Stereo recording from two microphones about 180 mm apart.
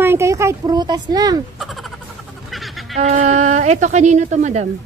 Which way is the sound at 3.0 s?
40° right (ahead or behind).